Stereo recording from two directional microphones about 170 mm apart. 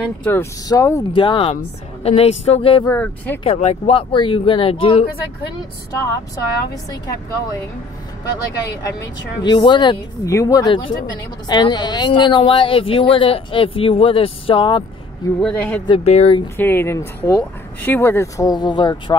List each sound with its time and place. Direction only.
0.0 s speech: 10° left (ahead or behind)
1.1 s a woman's voice: 30° left (ahead or behind)
2.8 s speech: 10° left (ahead or behind)
3.4 s a woman's voice: 35° left (ahead or behind)
5.9 s a woman's voice: 20° left (ahead or behind)
9.4 s a woman's voice: 25° left (ahead or behind)
15.4 s speech: 10° left (ahead or behind)
15.9 s a woman's voice: 40° left (ahead or behind)
16.5 s speech: 10° left (ahead or behind)